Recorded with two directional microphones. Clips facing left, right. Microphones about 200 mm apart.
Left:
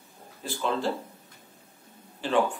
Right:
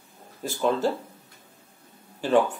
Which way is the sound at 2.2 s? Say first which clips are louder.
Right 4 dB; 45° right (ahead or behind).